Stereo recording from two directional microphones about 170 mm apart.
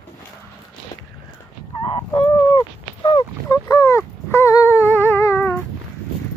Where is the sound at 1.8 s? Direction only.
35° left (ahead or behind).